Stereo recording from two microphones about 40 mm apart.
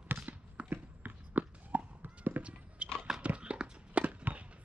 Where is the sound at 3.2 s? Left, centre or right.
Right.